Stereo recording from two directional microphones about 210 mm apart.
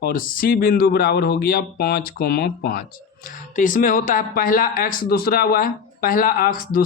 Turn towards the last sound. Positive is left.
turn(degrees=45)  # may be behind; listen again after turning